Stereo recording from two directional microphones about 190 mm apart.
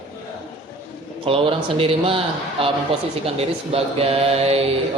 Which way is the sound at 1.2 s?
30° right (ahead or behind).